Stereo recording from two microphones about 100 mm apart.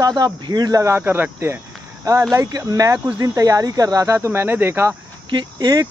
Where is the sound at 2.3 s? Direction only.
35° right (ahead or behind).